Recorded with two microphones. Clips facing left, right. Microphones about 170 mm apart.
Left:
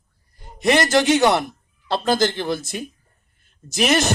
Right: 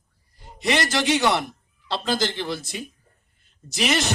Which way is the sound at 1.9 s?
50° left (ahead or behind).